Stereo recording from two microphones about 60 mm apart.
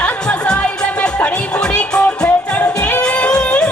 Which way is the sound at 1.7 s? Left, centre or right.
Centre.